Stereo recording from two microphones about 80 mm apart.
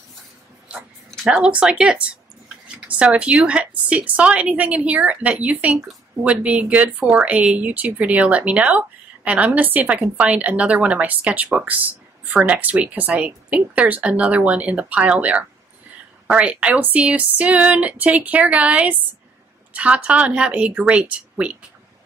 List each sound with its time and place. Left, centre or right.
1.3 s speech: centre